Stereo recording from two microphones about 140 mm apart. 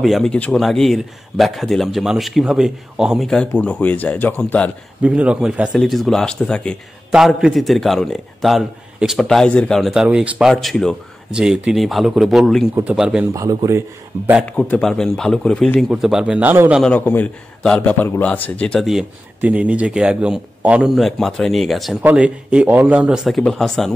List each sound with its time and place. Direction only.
0.0 s speech: centre (ahead or behind)
5.0 s speech: 10° right (ahead or behind)
13.3 s speech: 25° right (ahead or behind)
14.6 s speech: 5° left (ahead or behind); by 16.8 s 10° right (ahead or behind)
16.8 s speech: 10° left (ahead or behind)